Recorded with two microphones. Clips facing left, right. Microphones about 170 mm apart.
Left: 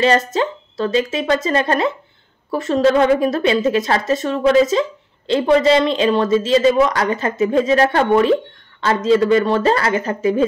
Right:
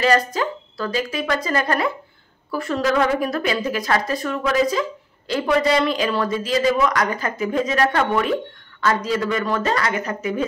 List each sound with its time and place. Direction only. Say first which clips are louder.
0.0 s a woman's voice: left 3 dB; 25° left (ahead or behind)